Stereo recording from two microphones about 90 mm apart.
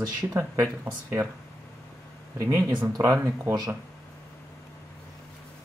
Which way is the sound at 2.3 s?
40° right (ahead or behind).